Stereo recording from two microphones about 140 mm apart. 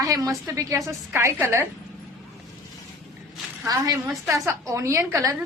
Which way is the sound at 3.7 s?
25° right (ahead or behind).